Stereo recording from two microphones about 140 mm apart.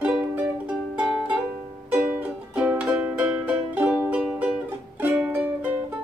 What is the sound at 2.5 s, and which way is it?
Music, 10° right (ahead or behind).